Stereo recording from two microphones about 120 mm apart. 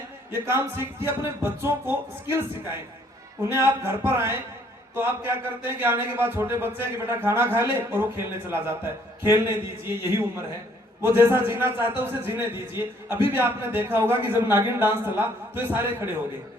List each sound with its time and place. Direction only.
0.3 s a man's voice: 20° right (ahead or behind)
3.4 s a man's voice: 20° right (ahead or behind)